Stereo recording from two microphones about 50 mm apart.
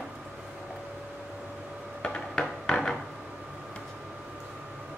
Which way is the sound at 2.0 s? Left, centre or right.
Centre.